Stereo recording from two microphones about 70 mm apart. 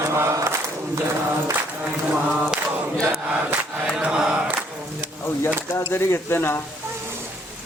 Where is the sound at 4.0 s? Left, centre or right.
Centre.